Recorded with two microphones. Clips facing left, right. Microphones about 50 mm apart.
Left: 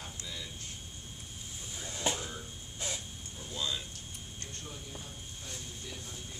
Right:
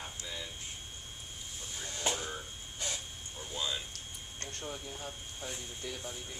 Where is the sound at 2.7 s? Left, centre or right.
Centre.